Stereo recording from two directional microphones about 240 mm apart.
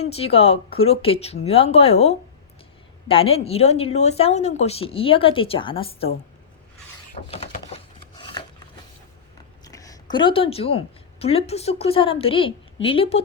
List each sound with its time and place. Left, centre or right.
0.0 s speech: left
7.1 s a sound: left
9.6 s a woman's voice: centre